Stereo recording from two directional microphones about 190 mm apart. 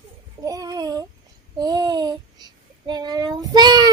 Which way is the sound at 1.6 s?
20° right (ahead or behind).